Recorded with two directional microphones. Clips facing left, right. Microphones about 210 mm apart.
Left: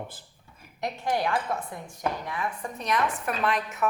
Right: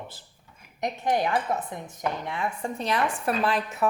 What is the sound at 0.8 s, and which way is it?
A woman's voice, 20° right (ahead or behind).